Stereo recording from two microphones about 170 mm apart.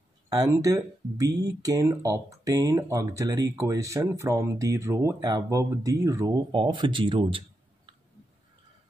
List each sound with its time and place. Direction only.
0.3 s speech: 20° right (ahead or behind)